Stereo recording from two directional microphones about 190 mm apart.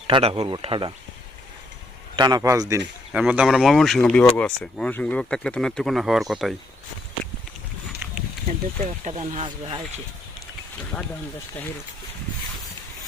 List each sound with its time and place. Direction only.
0.1 s speech: 30° right (ahead or behind)
2.1 s a man's voice: 20° right (ahead or behind)
3.1 s speech: 5° right (ahead or behind)
8.0 s a sound: 5° right (ahead or behind)
9.0 s speech: 35° right (ahead or behind)